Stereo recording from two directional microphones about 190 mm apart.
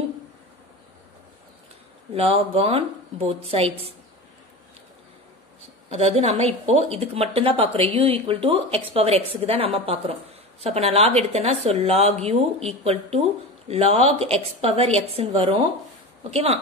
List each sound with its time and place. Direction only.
2.1 s a woman's voice: 30° right (ahead or behind)
5.9 s a woman's voice: 35° right (ahead or behind)